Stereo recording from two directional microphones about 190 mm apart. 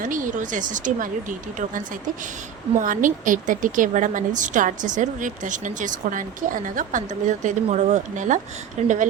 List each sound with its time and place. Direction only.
0.0 s speech: 45° right (ahead or behind)
2.8 s a woman's voice: 45° right (ahead or behind)